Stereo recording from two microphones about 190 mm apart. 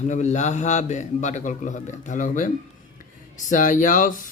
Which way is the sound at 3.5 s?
45° left (ahead or behind).